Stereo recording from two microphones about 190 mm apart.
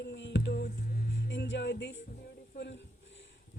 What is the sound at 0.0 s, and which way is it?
Music, 65° left (ahead or behind).